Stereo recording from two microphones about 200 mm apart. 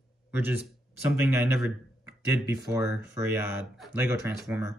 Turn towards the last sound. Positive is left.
turn(degrees=-15)  # may be behind; listen again after turning